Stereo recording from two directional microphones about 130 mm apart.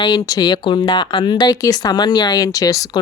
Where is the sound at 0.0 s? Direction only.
30° left (ahead or behind).